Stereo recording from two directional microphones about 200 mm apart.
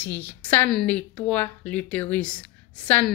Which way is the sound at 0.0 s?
10° left (ahead or behind).